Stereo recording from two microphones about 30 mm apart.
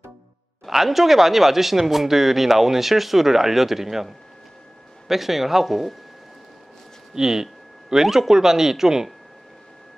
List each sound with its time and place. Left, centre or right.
0.7 s speech: centre
7.2 s speech: centre